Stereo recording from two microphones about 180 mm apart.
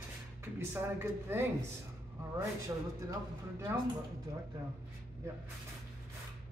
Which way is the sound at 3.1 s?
15° right (ahead or behind).